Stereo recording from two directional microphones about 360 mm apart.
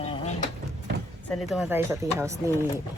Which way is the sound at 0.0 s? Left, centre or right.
Centre.